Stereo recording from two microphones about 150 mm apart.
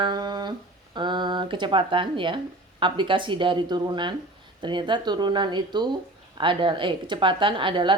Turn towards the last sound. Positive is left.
turn(degrees=-35)  # may be behind; listen again after turning